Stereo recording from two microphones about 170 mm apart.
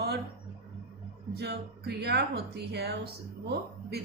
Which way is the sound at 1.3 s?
75° right (ahead or behind).